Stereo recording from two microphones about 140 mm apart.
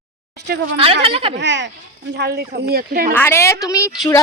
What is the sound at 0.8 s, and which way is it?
Speech, 40° right (ahead or behind).